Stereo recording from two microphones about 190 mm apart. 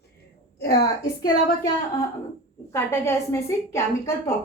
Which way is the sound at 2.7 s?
15° left (ahead or behind).